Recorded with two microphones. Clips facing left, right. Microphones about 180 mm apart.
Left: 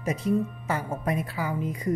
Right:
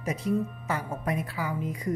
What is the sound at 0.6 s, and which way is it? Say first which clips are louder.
A woman's voice: left 2 dB; 30° left (ahead or behind).